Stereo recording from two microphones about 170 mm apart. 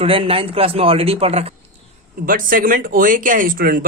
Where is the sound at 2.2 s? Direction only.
55° right (ahead or behind).